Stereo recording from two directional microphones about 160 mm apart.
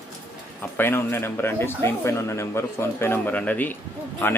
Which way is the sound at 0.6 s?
15° left (ahead or behind).